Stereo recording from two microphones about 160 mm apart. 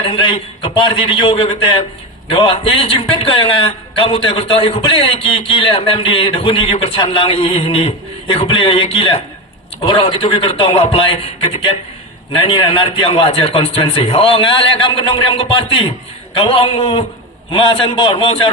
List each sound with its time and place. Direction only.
0.0 s a man's voice: 35° left (ahead or behind)